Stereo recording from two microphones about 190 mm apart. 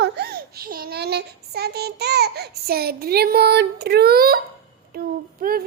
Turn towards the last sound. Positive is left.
turn(degrees=-50)  # may be behind; listen again after turning